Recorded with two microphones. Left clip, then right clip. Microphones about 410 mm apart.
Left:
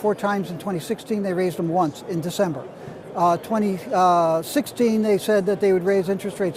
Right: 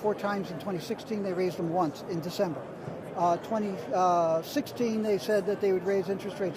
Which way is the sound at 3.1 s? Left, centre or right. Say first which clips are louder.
Left 7 dB; left.